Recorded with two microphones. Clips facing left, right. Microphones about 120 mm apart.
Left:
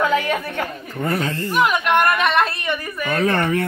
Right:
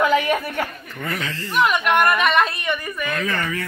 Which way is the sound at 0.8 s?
40° left (ahead or behind).